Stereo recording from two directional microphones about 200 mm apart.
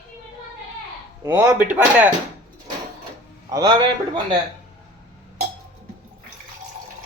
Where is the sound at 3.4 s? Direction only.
20° right (ahead or behind).